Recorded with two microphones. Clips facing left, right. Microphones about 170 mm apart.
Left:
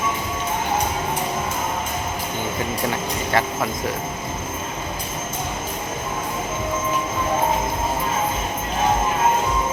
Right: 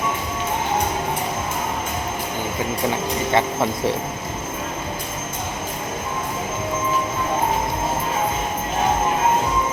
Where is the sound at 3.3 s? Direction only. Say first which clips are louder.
Right 2 dB; 25° right (ahead or behind).